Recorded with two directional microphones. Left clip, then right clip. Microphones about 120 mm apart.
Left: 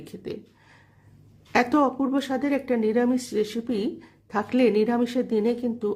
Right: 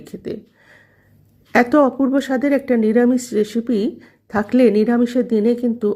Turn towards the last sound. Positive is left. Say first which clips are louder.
# right 8 dB
turn(degrees=-35)  # may be behind; listen again after turning